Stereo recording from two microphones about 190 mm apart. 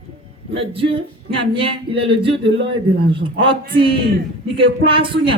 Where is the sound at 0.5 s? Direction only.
30° right (ahead or behind).